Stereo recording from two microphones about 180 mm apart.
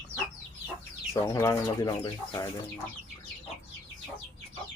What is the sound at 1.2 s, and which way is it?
Speech, 15° left (ahead or behind).